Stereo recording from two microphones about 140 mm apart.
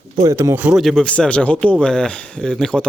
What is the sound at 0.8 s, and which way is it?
Speech, centre (ahead or behind).